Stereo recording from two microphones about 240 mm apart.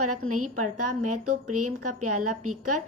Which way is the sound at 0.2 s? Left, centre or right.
Right.